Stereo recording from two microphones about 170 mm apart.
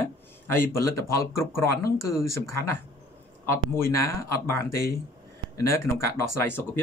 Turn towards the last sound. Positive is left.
turn(degrees=15)  # may be behind; listen again after turning